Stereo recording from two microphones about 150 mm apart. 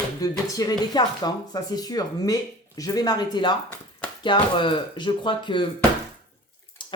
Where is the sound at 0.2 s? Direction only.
25° left (ahead or behind).